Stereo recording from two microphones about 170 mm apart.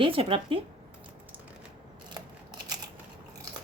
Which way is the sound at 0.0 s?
35° right (ahead or behind).